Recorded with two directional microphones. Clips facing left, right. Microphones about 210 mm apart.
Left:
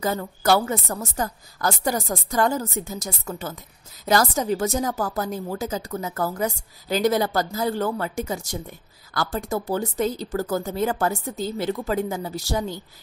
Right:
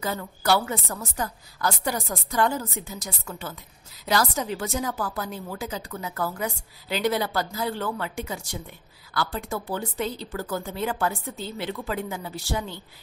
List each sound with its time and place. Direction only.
0.0 s a woman's voice: 40° left (ahead or behind)